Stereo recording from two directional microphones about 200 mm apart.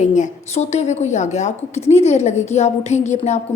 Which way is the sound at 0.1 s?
35° left (ahead or behind).